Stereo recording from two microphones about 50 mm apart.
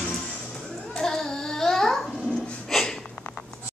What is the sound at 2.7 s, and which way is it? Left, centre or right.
Sniff, centre.